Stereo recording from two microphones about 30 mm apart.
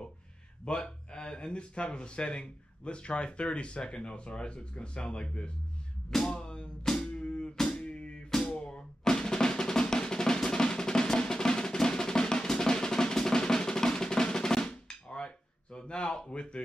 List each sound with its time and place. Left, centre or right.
0.7 s speech: left
6.2 s music: left
6.8 s music: centre
7.2 s drum: left
8.5 s music: left
9.2 s drum: left
16.3 s speech: left